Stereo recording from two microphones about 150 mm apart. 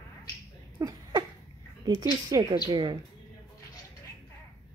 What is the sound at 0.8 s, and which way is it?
A woman's voice, 20° right (ahead or behind).